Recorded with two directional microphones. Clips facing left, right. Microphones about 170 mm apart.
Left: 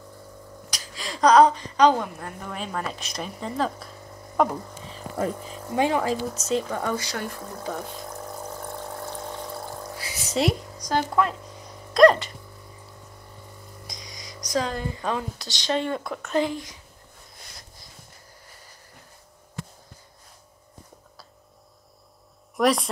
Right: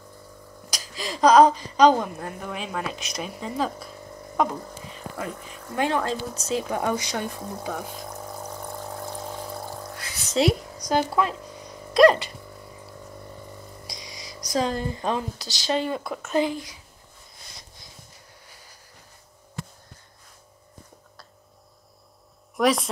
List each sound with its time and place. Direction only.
1.2 s a woman's voice: 10° right (ahead or behind)
2.4 s speech: 5° right (ahead or behind)
4.4 s a sound: centre (ahead or behind)
5.1 s speech: 35° left (ahead or behind)
5.7 s speech: 15° left (ahead or behind)
6.7 s pour: 15° right (ahead or behind)
9.8 s a sound: 5° left (ahead or behind)
10.9 s a woman's voice: 15° right (ahead or behind)
11.9 s a sound: 5° right (ahead or behind)
14.5 s a woman's voice: 30° right (ahead or behind)
15.3 s speech: centre (ahead or behind)
22.6 s speech: centre (ahead or behind)